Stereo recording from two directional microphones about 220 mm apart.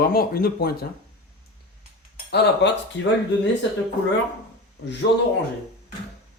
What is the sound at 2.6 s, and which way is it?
Speech, 50° left (ahead or behind).